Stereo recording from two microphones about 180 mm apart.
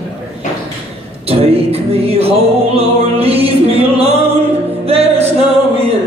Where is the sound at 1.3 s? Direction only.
35° right (ahead or behind).